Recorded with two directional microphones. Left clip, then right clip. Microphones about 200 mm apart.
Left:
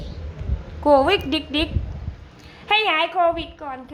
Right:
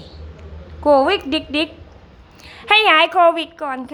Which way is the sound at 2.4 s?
30° right (ahead or behind).